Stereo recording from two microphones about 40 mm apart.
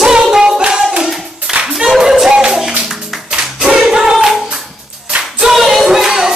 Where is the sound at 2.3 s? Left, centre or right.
Centre.